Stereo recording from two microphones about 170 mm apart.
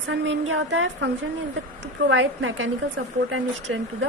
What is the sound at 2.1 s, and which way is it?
Speech, 90° right.